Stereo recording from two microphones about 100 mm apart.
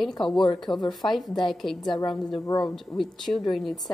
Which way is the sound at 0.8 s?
45° left (ahead or behind).